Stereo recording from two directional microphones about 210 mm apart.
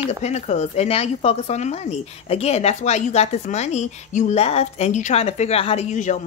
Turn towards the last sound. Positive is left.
turn(degrees=35)  # may be behind; listen again after turning